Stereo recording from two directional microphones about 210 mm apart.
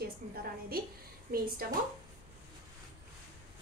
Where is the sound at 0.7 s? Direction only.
45° right (ahead or behind).